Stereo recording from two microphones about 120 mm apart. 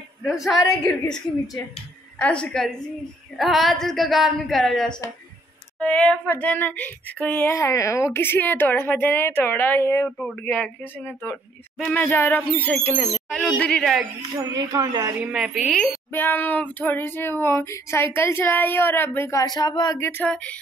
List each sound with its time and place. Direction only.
0.2 s a woman's voice: centre (ahead or behind)
2.1 s a woman's voice: 10° left (ahead or behind)
6.2 s speech: 15° left (ahead or behind)
7.5 s a sound: 25° left (ahead or behind)
10.1 s speech: 10° left (ahead or behind)
14.3 s speech: 30° right (ahead or behind)
15.1 s a woman's voice: 5° right (ahead or behind)
16.1 s a sound: 15° left (ahead or behind)
19.4 s speech: 35° left (ahead or behind)
20.0 s speech: 15° left (ahead or behind)